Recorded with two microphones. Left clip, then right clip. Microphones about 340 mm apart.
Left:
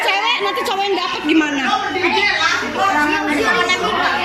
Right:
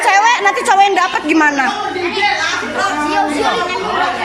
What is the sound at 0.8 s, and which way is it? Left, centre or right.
Speech, centre.